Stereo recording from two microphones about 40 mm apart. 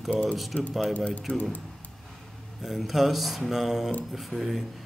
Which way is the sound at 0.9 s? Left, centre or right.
Left.